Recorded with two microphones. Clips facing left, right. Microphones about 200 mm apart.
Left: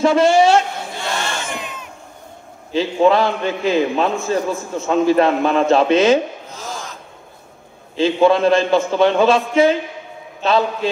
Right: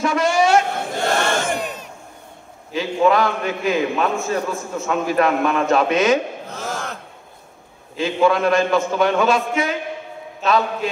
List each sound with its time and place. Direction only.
0.0 s a woman's voice: 30° left (ahead or behind)
0.9 s battle cry: 50° right (ahead or behind)
2.7 s a man's voice: 30° left (ahead or behind)
6.5 s a sound: 60° right (ahead or behind)
7.9 s a man's voice: 30° left (ahead or behind)